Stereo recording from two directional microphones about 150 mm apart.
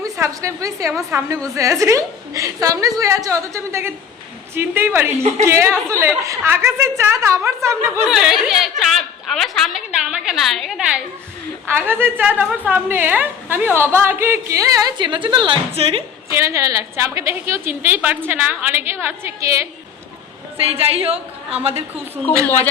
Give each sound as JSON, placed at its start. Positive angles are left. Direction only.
{"t": 0.0, "sound": "a woman's voice", "side_deg": -20}
{"t": 8.0, "sound": "a woman's voice", "side_deg": -5}
{"t": 16.3, "sound": "a woman's voice", "side_deg": -20}
{"t": 20.6, "sound": "a woman's voice", "side_deg": -40}